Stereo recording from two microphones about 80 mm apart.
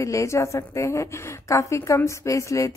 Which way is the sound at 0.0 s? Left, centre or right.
Left.